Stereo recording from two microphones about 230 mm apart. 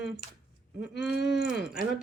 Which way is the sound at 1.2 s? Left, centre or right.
Left.